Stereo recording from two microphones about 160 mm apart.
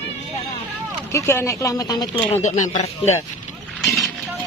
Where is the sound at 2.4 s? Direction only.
50° left (ahead or behind).